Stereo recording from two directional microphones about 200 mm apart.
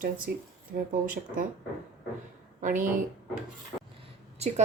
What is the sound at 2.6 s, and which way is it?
Speech, 40° right (ahead or behind).